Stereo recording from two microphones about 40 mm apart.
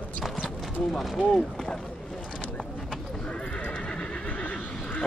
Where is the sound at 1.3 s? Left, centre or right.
Centre.